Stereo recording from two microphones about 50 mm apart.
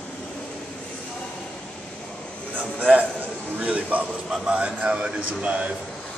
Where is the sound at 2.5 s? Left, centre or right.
Right.